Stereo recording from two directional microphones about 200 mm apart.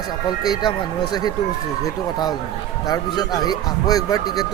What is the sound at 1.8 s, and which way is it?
Speech, 20° left (ahead or behind).